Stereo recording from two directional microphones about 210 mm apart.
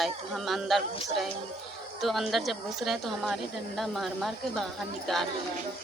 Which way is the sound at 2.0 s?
Centre (ahead or behind).